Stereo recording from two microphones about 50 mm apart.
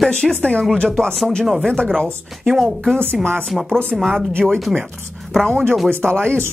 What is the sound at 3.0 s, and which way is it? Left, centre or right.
Speech, centre.